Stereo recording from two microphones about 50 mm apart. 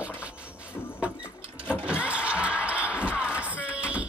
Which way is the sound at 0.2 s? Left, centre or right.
Right.